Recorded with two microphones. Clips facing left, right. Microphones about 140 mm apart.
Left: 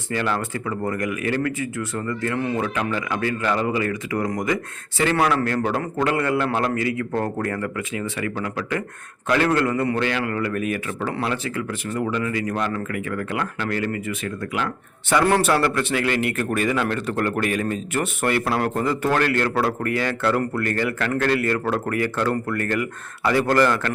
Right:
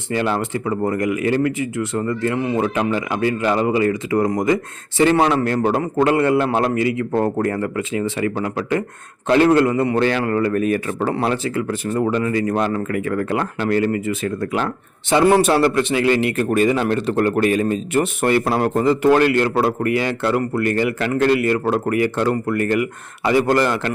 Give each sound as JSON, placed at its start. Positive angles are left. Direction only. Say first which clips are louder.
{"t": 0.1, "sound": "a man's voice", "louder": "right 4 dB", "side_deg": -25}
{"t": 15.1, "sound": "a man's voice", "louder": "right 4 dB", "side_deg": -15}